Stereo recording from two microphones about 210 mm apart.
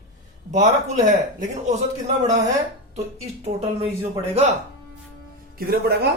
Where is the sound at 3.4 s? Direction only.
30° right (ahead or behind).